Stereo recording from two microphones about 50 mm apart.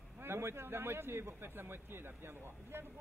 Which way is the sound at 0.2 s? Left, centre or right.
Right.